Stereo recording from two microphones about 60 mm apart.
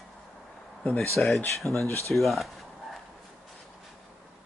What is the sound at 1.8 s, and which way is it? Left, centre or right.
Speech, left.